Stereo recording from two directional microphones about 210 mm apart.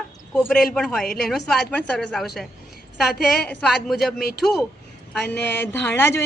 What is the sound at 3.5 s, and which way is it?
A woman's voice, 5° left (ahead or behind).